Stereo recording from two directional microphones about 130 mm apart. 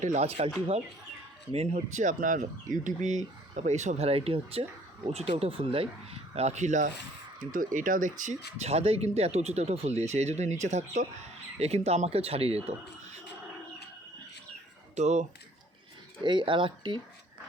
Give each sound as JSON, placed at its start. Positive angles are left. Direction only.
{"t": 0.0, "sound": "speech", "side_deg": -60}
{"t": 7.3, "sound": "speech", "side_deg": -90}
{"t": 11.6, "sound": "speech", "side_deg": -55}
{"t": 14.9, "sound": "speech", "side_deg": -65}
{"t": 16.2, "sound": "speech", "side_deg": -40}